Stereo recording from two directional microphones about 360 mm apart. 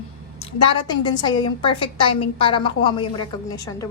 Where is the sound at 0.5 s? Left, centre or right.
Centre.